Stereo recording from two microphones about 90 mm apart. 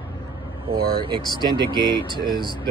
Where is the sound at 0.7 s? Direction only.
70° right (ahead or behind).